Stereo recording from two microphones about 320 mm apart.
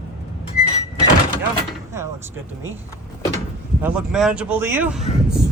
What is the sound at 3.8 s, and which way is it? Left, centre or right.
Speech, centre.